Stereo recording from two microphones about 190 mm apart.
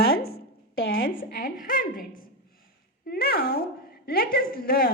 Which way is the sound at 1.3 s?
50° left (ahead or behind).